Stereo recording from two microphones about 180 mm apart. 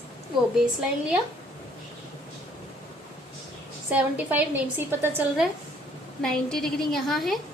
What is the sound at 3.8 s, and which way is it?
A woman's voice, 10° right (ahead or behind).